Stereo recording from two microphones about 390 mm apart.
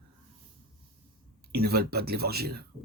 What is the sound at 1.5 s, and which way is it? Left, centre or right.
Speech, right.